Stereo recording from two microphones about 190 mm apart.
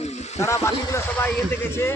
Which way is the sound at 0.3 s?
15° left (ahead or behind).